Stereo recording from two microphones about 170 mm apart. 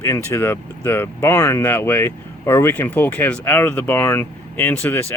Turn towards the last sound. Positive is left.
turn(degrees=10)  # may be behind; listen again after turning